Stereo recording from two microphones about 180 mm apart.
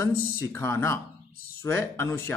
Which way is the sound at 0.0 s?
15° left (ahead or behind).